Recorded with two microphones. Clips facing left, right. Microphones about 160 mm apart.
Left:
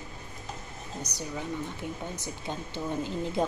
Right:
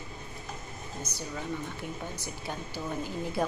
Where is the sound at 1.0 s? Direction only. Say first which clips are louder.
Left 2 dB; 15° left (ahead or behind).